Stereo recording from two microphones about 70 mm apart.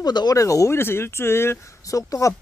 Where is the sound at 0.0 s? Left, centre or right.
Left.